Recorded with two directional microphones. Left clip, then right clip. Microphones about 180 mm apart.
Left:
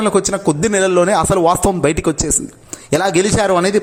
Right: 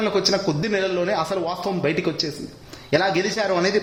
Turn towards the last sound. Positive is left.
turn(degrees=30)  # may be behind; listen again after turning